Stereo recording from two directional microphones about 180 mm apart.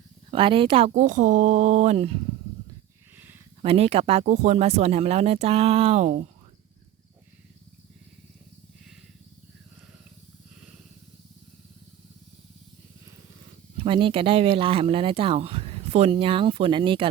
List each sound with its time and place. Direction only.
0.3 s speech: 30° right (ahead or behind)
3.6 s speech: 35° right (ahead or behind)
13.7 s speech: 30° right (ahead or behind)